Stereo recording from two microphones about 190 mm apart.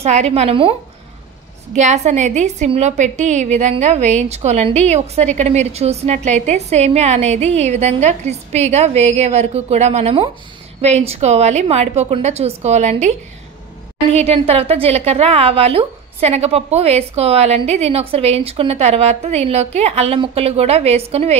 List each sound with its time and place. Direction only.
0.0 s a woman's voice: 35° right (ahead or behind)
1.8 s a woman's voice: 40° right (ahead or behind)
14.1 s a woman's voice: 30° right (ahead or behind)